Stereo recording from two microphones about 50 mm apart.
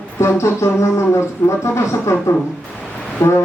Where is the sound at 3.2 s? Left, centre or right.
Left.